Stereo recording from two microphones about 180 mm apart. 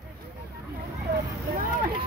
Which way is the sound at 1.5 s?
55° right (ahead or behind).